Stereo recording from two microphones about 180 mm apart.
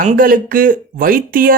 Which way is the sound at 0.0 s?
50° right (ahead or behind).